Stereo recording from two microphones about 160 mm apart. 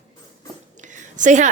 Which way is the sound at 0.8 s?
50° right (ahead or behind).